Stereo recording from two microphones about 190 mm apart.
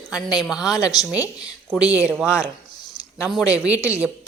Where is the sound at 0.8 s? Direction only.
20° left (ahead or behind).